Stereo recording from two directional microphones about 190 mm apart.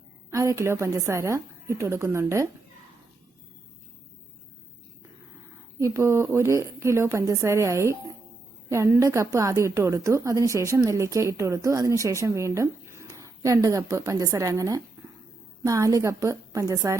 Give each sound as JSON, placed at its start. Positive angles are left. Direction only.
{"t": 0.3, "sound": "a woman's voice", "side_deg": -15}
{"t": 5.8, "sound": "a woman's voice", "side_deg": -15}